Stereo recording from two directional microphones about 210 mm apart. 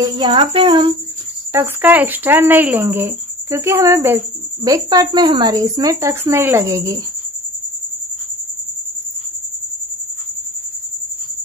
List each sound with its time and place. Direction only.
0.0 s music: 20° right (ahead or behind)
1.5 s speech: 10° right (ahead or behind)